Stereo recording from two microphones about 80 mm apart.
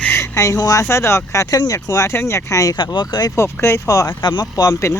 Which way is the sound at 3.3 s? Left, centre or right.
Left.